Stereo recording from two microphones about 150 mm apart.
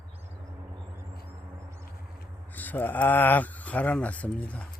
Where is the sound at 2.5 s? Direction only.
10° left (ahead or behind).